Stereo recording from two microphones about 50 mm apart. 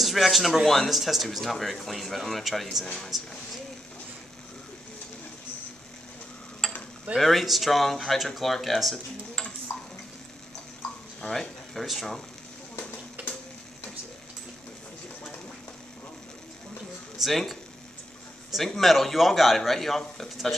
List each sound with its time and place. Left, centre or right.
0.0 s speech: centre
7.2 s speech: centre
9.7 s stir: left
11.1 s speech: centre
13.2 s a sound: right
17.2 s speech: centre
18.6 s speech: centre